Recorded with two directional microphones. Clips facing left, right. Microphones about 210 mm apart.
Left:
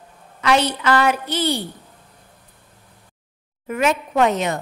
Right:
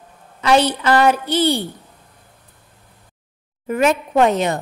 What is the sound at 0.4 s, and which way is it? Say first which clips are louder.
A woman's voice: right 3 dB; 30° right (ahead or behind).